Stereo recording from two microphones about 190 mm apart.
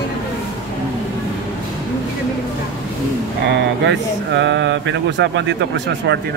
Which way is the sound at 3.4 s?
65° right (ahead or behind).